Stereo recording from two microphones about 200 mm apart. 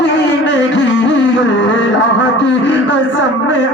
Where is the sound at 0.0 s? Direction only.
65° left (ahead or behind).